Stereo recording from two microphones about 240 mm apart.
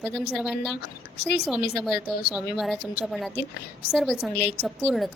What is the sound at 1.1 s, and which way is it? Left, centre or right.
Speech, left.